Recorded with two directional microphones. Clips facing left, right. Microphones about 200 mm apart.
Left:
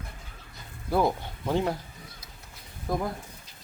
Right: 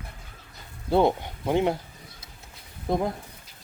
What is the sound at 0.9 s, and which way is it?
Speech, 25° right (ahead or behind).